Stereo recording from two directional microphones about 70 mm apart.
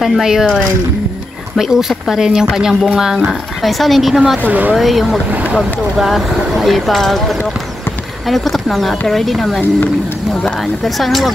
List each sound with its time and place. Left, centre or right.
0.0 s speech: centre
1.6 s speech: centre
2.7 s speech: centre
3.0 s speech: centre
4.4 s speech: right
4.7 s speech: centre
5.3 s speech: centre
5.6 s speech: centre
10.6 s speech: centre